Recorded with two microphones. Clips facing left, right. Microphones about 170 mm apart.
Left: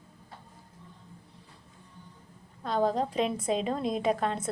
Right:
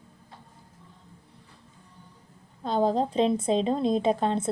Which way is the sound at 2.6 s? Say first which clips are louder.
Right 3 dB; 25° right (ahead or behind).